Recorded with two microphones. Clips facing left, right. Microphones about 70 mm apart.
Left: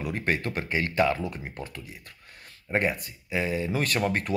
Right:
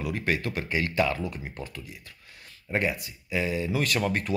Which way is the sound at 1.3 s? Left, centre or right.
Left.